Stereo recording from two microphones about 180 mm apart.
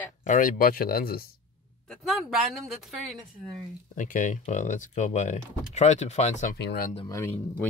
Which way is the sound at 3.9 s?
45° left (ahead or behind).